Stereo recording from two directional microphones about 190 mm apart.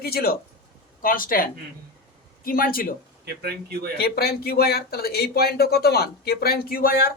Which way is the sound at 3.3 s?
55° right (ahead or behind).